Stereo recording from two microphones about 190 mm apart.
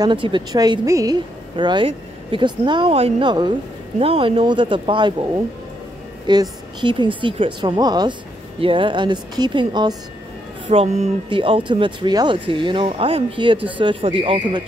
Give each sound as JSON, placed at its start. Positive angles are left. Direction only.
{"t": 0.0, "sound": "speech", "side_deg": -25}
{"t": 6.2, "sound": "speech", "side_deg": -20}